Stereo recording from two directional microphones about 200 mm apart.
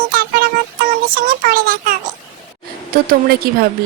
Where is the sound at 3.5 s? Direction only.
50° right (ahead or behind).